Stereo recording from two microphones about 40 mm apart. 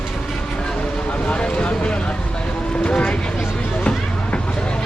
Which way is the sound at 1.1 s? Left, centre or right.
Left.